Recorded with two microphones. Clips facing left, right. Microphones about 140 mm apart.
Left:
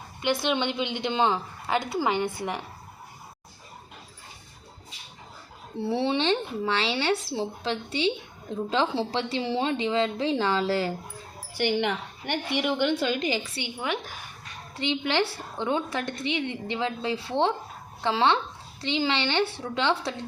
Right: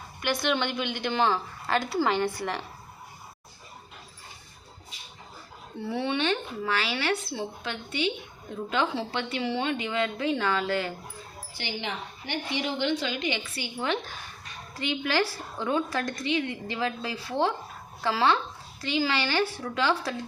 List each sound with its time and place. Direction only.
0.2 s a woman's voice: 25° left (ahead or behind)
5.7 s a woman's voice: 30° left (ahead or behind)
11.5 s a woman's voice: 60° left (ahead or behind); by 13.4 s 40° left (ahead or behind)
13.6 s a woman's voice: 15° left (ahead or behind)
14.8 s a woman's voice: 25° left (ahead or behind)